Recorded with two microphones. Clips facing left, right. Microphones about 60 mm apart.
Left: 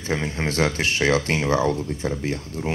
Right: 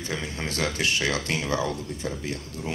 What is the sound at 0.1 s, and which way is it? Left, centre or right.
Speech, left.